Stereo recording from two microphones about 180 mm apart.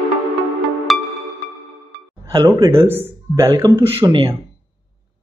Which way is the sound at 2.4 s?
15° right (ahead or behind).